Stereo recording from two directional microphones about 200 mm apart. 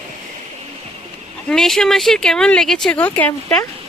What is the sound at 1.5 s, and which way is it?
Speech, centre (ahead or behind).